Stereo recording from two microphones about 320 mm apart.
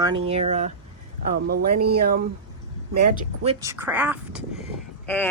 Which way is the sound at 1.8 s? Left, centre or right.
Right.